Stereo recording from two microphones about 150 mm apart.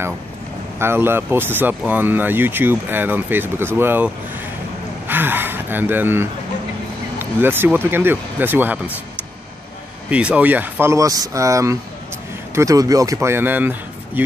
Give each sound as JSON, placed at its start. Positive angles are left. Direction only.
{"t": 0.7, "sound": "speech", "side_deg": -15}
{"t": 7.3, "sound": "speech", "side_deg": -15}
{"t": 10.0, "sound": "speech", "side_deg": -10}